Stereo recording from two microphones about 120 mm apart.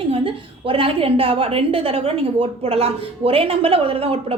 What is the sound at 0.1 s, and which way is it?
A woman's voice, 50° right (ahead or behind).